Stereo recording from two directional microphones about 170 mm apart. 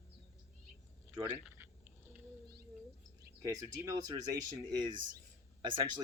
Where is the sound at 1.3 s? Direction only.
15° right (ahead or behind).